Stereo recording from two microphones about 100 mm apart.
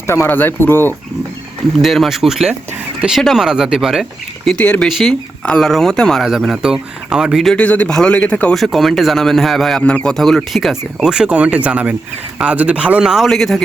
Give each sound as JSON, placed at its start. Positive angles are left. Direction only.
{"t": 0.1, "sound": "speech", "side_deg": 20}
{"t": 1.8, "sound": "a man's voice", "side_deg": 0}
{"t": 4.4, "sound": "a man's voice", "side_deg": 10}
{"t": 4.9, "sound": "a man's voice", "side_deg": 0}
{"t": 7.5, "sound": "a man's voice", "side_deg": 15}
{"t": 8.5, "sound": "a man's voice", "side_deg": 0}